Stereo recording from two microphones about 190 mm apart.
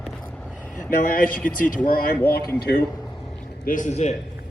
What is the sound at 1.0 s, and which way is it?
Speech, 45° left (ahead or behind).